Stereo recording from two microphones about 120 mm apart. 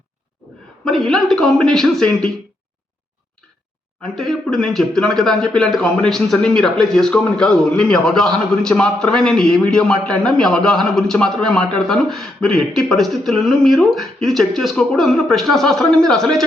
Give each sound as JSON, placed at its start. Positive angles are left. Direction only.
{"t": 0.9, "sound": "speech", "side_deg": 0}
{"t": 4.0, "sound": "speech", "side_deg": 5}